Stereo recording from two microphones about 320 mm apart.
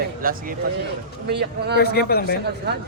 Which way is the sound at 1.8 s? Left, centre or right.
Left.